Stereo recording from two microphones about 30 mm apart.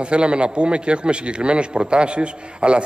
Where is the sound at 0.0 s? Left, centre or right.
Right.